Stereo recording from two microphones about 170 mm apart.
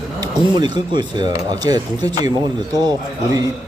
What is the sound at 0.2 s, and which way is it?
Speech, 25° right (ahead or behind).